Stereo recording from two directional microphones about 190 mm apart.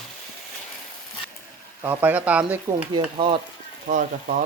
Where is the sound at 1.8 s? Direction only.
10° right (ahead or behind).